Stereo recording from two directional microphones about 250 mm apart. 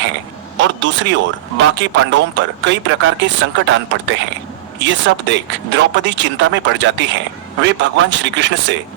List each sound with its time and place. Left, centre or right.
0.6 s speech: right